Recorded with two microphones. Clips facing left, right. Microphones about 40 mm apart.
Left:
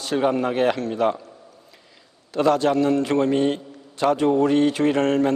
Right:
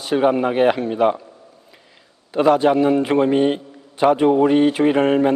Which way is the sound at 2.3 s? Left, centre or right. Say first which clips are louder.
Right 4 dB; centre.